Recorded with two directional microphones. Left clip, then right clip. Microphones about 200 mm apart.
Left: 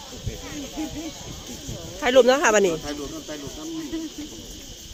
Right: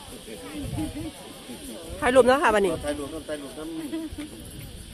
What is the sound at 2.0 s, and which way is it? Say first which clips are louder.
Speech: left 2 dB; centre (ahead or behind).